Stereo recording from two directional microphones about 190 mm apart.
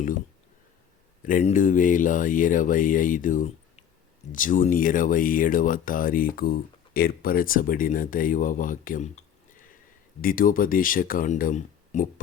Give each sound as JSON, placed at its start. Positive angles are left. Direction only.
{"t": 1.2, "sound": "speech", "side_deg": 40}